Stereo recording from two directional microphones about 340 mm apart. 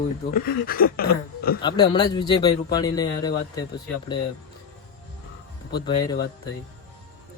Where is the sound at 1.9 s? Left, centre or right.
Centre.